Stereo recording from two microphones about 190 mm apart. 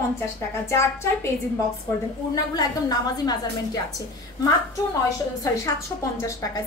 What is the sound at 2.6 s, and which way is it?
A woman's voice, 20° left (ahead or behind).